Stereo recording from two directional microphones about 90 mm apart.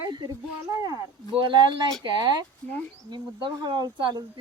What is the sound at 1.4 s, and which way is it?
Speech, 60° right (ahead or behind).